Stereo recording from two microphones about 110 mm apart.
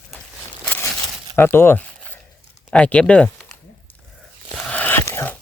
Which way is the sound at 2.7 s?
10° left (ahead or behind).